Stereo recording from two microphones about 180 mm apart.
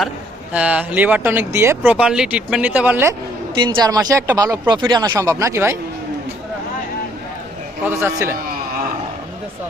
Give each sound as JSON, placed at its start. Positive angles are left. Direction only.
{"t": 0.5, "sound": "speech", "side_deg": -5}
{"t": 3.5, "sound": "speech", "side_deg": -20}
{"t": 7.9, "sound": "speech", "side_deg": -15}